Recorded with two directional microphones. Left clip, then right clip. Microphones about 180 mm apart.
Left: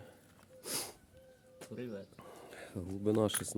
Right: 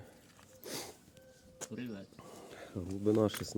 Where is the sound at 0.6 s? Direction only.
10° left (ahead or behind).